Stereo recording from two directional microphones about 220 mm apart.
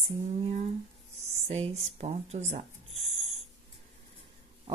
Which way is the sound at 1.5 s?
25° right (ahead or behind).